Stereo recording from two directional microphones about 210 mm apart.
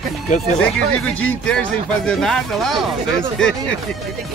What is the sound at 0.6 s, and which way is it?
Speech, 5° left (ahead or behind).